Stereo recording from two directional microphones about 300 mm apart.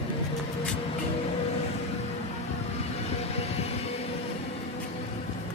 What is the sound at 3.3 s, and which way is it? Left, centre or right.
Train, left.